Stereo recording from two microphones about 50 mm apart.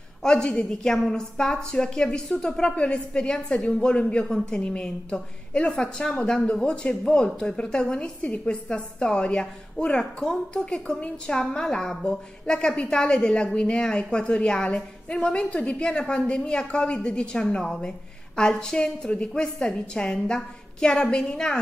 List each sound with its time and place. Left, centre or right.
0.2 s a woman's voice: centre